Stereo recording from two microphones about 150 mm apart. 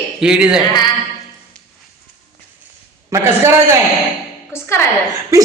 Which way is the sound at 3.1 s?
20° right (ahead or behind).